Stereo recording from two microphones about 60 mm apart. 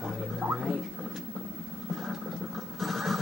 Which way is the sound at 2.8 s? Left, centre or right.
Centre.